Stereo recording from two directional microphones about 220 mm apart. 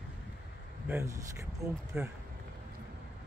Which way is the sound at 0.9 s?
10° right (ahead or behind).